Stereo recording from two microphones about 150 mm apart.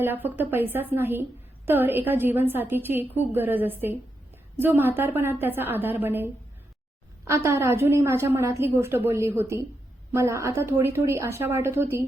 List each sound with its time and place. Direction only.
0.0 s a woman's voice: 15° right (ahead or behind)